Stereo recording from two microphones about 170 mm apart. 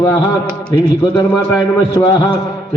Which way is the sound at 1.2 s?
25° left (ahead or behind).